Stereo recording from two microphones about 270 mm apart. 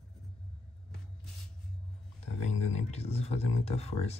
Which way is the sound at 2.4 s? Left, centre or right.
Left.